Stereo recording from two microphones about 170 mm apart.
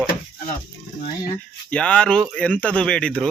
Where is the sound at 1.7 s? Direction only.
5° left (ahead or behind).